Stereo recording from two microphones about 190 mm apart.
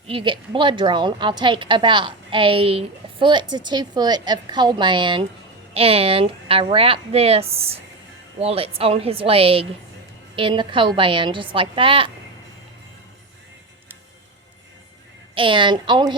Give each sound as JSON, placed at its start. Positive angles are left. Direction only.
{"t": 0.1, "sound": "a woman's voice", "side_deg": -25}
{"t": 15.4, "sound": "a woman's voice", "side_deg": -25}